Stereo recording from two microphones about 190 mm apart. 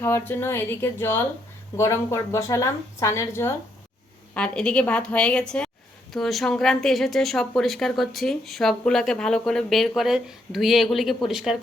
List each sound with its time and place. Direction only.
0.0 s a woman's voice: 10° left (ahead or behind)